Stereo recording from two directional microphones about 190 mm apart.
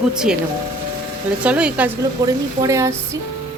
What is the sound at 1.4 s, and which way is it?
Speech, 5° right (ahead or behind).